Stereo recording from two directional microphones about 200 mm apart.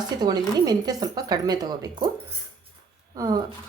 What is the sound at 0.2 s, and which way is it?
Speech, 20° right (ahead or behind).